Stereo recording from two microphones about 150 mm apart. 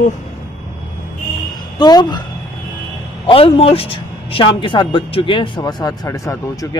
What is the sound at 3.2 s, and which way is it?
Speech, 40° left (ahead or behind).